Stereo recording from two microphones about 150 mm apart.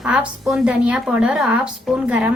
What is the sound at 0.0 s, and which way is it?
Speech, 5° right (ahead or behind).